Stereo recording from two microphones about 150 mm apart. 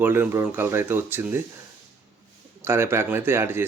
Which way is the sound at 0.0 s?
15° right (ahead or behind).